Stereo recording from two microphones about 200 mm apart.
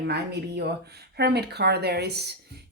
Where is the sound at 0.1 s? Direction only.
55° right (ahead or behind).